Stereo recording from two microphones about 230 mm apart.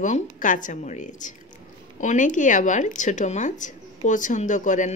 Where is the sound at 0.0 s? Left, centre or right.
Left.